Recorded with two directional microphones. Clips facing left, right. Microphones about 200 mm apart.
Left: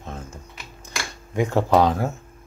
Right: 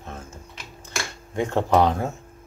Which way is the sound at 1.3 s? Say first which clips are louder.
Left 2 dB; 10° left (ahead or behind).